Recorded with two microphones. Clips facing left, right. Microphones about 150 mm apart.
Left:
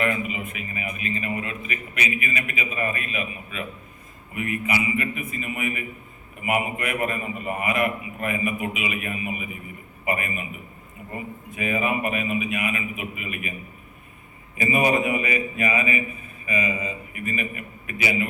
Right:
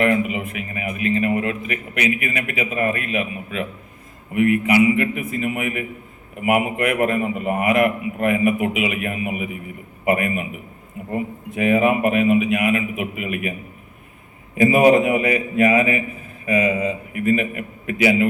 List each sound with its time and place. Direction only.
0.0 s a man's voice: 70° right (ahead or behind)
14.6 s a man's voice: 70° right (ahead or behind); by 18.3 s 90° right